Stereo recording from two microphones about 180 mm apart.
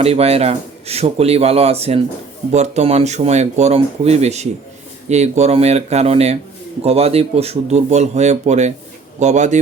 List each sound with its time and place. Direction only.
0.0 s speech: 35° right (ahead or behind)